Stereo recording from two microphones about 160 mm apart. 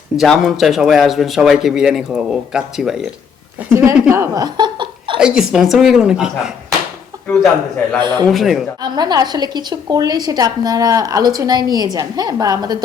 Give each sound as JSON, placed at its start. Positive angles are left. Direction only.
{"t": 0.2, "sound": "speech", "side_deg": 0}
{"t": 3.7, "sound": "speech", "side_deg": -15}
{"t": 5.2, "sound": "speech", "side_deg": -5}
{"t": 8.0, "sound": "a woman's voice", "side_deg": -25}
{"t": 8.3, "sound": "speech", "side_deg": 0}
{"t": 8.8, "sound": "a woman's voice", "side_deg": -25}